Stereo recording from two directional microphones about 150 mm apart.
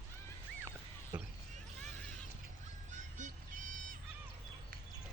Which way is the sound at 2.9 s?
55° right (ahead or behind).